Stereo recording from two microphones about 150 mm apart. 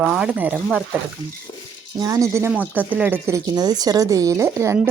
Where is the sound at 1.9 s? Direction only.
20° right (ahead or behind).